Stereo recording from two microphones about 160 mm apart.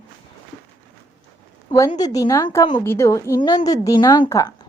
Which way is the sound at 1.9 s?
25° left (ahead or behind).